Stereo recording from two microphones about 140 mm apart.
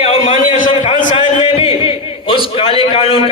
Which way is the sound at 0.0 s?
45° left (ahead or behind).